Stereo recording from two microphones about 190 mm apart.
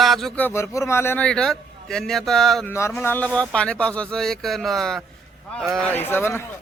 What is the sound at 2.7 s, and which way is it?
Speech, 15° left (ahead or behind).